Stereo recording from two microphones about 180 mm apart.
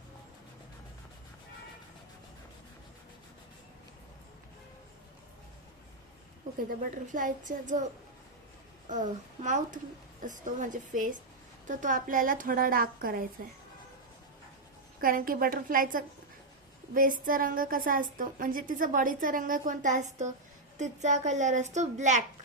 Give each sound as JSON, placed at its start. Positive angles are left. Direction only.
{"t": 6.7, "sound": "a woman's voice", "side_deg": -45}
{"t": 8.9, "sound": "a woman's voice", "side_deg": -45}
{"t": 15.0, "sound": "a woman's voice", "side_deg": -50}